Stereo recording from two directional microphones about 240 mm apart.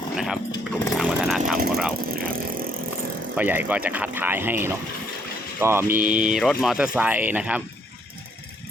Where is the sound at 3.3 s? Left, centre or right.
Centre.